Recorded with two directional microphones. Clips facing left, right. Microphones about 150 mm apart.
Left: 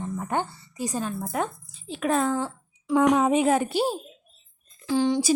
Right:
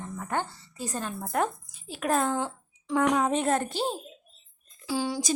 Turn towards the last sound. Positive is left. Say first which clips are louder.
# left 7 dB
turn(degrees=-5)  # may be behind; listen again after turning